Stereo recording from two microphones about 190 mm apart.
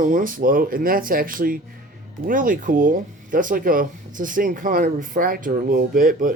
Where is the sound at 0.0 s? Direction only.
45° right (ahead or behind).